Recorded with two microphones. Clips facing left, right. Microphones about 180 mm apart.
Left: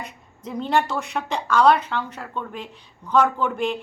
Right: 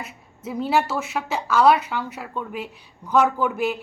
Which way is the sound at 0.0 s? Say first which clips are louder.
Right 1 dB; 5° right (ahead or behind).